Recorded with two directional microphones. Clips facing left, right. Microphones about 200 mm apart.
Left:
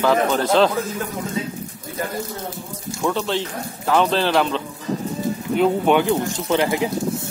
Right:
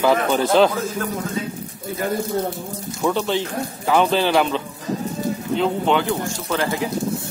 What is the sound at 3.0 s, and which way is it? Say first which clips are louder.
Speech: right 1 dB; 5° right (ahead or behind).